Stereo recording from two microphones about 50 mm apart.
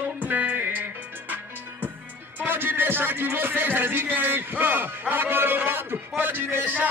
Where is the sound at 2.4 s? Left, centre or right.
Right.